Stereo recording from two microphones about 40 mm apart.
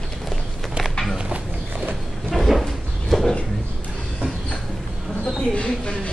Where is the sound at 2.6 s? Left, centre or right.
Centre.